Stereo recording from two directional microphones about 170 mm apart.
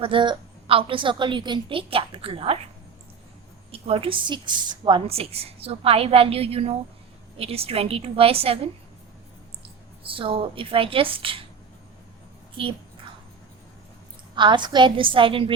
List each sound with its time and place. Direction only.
0.0 s a woman's voice: 30° right (ahead or behind)
3.7 s a woman's voice: 35° right (ahead or behind)
12.6 s a woman's voice: 30° right (ahead or behind)
14.3 s a woman's voice: 30° right (ahead or behind)